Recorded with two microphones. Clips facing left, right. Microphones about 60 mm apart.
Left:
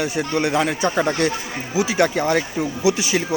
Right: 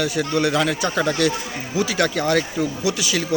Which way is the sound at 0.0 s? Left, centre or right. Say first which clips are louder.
Right 1 dB; left.